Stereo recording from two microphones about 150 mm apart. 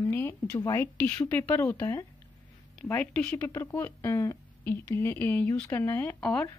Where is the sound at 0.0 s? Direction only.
15° left (ahead or behind).